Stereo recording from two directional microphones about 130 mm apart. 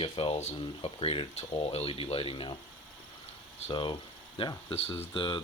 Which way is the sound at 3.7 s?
40° left (ahead or behind).